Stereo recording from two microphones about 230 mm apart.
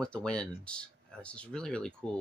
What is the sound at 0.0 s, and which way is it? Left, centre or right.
Speech, centre.